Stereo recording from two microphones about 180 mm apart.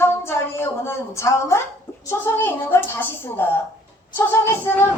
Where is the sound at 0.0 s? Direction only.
15° left (ahead or behind).